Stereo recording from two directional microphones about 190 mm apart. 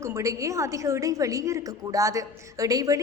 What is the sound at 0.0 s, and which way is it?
A woman's voice, 15° right (ahead or behind).